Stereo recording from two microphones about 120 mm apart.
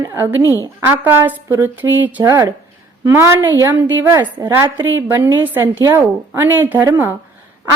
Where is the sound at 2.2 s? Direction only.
30° right (ahead or behind).